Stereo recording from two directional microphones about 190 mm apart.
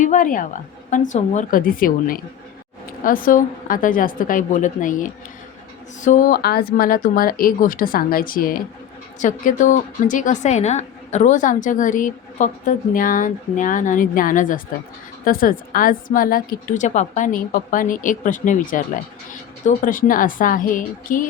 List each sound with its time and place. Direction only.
0.0 s a woman's voice: 40° left (ahead or behind)